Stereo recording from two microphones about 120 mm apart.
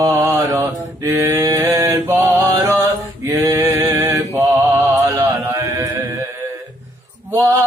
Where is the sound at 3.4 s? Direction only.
20° right (ahead or behind).